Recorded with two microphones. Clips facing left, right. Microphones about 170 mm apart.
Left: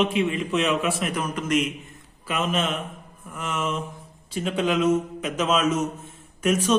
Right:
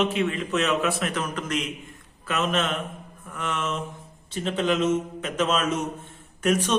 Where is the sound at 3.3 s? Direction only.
5° left (ahead or behind).